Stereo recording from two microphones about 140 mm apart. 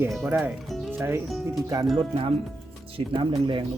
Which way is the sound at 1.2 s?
Centre (ahead or behind).